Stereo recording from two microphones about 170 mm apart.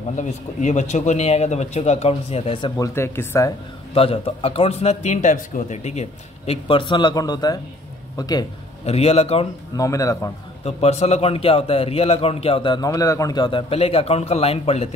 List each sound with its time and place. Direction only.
0.1 s a man's voice: 45° left (ahead or behind)
2.8 s speech: 15° left (ahead or behind)
3.9 s a man's voice: 35° left (ahead or behind)
8.8 s a man's voice: 40° left (ahead or behind)
9.8 s a man's voice: 20° left (ahead or behind)
10.6 s a man's voice: 40° left (ahead or behind)